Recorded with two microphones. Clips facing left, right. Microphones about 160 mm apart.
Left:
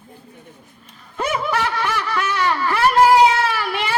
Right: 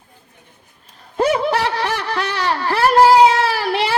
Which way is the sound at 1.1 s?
35° right (ahead or behind).